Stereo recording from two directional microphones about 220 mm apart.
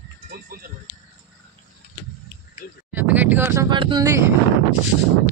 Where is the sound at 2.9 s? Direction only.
10° right (ahead or behind).